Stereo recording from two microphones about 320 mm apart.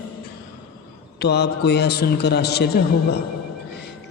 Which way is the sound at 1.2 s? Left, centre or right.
Left.